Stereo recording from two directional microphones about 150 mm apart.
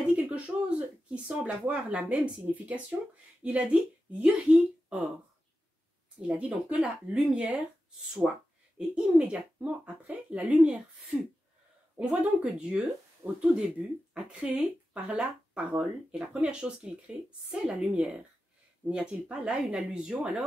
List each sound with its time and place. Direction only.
0.1 s speech: 10° right (ahead or behind)
4.8 s a sound: 10° right (ahead or behind)
6.2 s a woman's voice: 10° right (ahead or behind)